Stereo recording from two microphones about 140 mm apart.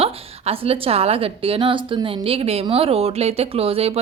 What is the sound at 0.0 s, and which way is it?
A woman's voice, 45° right (ahead or behind).